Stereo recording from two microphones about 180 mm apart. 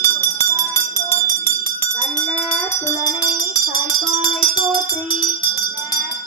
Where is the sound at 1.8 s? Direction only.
10° left (ahead or behind).